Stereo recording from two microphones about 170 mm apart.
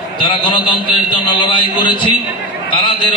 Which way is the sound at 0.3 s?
30° left (ahead or behind).